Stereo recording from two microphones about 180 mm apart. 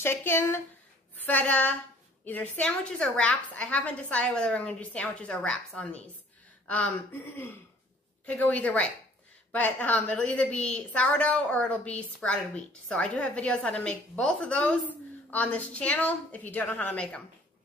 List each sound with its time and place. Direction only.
0.0 s a woman's voice: 15° left (ahead or behind)